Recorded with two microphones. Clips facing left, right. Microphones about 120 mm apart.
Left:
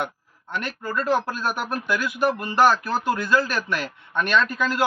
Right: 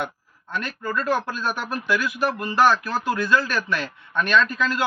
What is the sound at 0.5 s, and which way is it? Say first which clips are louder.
A man's voice: even; 5° left (ahead or behind).